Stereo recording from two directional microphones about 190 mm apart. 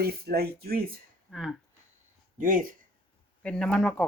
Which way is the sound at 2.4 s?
45° right (ahead or behind).